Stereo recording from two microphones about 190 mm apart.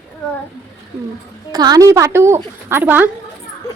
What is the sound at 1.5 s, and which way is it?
A woman's voice, 20° right (ahead or behind).